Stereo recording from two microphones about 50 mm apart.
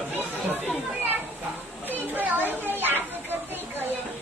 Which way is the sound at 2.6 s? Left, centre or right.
Right.